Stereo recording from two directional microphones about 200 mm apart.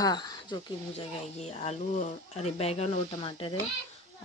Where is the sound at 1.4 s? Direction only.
30° left (ahead or behind).